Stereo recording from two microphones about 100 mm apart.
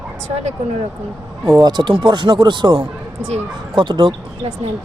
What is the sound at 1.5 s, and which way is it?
Speech, 45° right (ahead or behind).